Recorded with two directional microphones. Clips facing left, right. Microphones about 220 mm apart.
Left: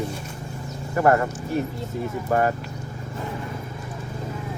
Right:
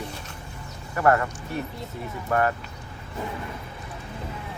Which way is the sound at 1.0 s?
25° left (ahead or behind).